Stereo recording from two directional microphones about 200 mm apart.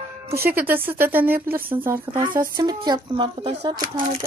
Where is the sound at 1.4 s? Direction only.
45° right (ahead or behind).